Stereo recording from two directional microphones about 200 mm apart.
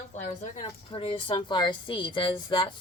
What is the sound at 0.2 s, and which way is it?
A woman's voice, 30° left (ahead or behind).